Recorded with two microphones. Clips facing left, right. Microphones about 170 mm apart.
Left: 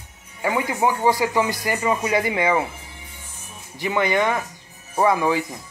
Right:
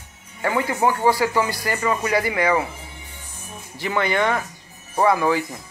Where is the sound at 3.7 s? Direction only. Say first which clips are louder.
Left 1 dB; 20° left (ahead or behind).